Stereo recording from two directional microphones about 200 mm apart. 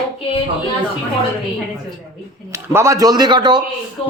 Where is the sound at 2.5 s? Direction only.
15° right (ahead or behind).